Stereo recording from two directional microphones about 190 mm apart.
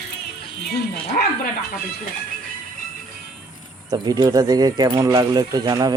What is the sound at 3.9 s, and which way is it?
Speech, 20° right (ahead or behind).